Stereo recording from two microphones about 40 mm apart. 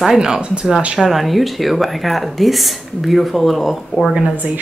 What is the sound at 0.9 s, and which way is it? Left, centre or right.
Speech, centre.